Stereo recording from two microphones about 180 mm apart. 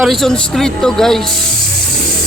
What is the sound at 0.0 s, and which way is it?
A man's voice, centre (ahead or behind).